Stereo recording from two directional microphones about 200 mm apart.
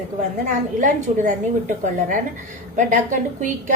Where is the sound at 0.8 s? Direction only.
40° right (ahead or behind).